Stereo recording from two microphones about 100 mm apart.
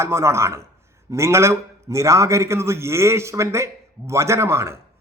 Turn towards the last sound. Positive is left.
turn(degrees=-30)  # may be behind; listen again after turning